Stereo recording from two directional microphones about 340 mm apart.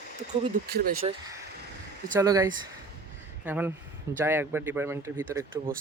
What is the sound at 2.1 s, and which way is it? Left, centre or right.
Speech, centre.